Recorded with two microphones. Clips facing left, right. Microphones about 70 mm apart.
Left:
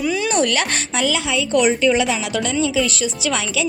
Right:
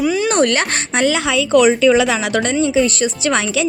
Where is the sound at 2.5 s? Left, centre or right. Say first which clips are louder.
Right 4 dB; right.